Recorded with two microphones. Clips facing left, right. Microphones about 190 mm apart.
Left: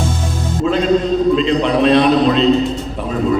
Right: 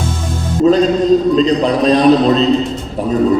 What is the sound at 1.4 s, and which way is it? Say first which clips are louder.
A man's voice: right 2 dB; 40° right (ahead or behind).